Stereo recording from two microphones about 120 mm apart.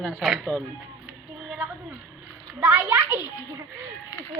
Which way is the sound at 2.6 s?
20° right (ahead or behind).